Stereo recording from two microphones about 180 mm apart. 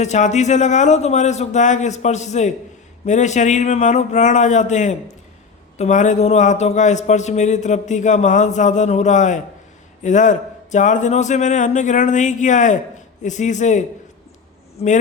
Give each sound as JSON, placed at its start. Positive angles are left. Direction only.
{"t": 0.0, "sound": "a man's voice", "side_deg": 40}